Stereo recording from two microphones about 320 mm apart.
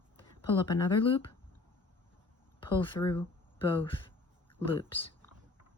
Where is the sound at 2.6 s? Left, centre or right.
Centre.